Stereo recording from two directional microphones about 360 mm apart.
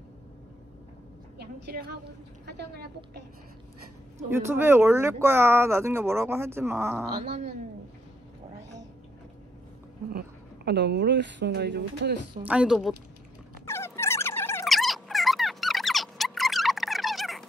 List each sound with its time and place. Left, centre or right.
1.4 s a woman's voice: right
4.3 s speech: centre
7.2 s speech: centre
10.1 s speech: right
12.4 s speech: centre
13.7 s a sound: centre